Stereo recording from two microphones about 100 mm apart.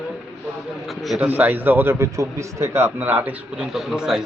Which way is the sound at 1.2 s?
15° right (ahead or behind).